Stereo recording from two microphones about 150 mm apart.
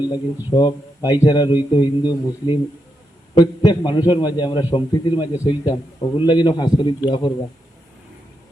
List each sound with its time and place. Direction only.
0.1 s a man's voice: 25° left (ahead or behind)